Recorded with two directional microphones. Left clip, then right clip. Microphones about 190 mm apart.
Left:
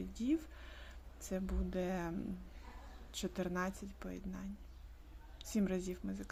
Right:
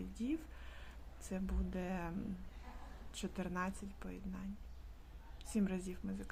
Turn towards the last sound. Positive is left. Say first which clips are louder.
# left 3 dB
turn(degrees=15)  # may be behind; listen again after turning